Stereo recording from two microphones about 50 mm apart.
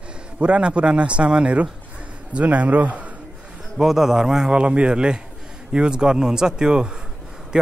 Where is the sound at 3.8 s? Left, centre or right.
Centre.